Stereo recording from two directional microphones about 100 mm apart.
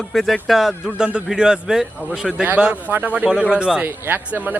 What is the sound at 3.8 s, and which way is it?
Speech, 20° right (ahead or behind).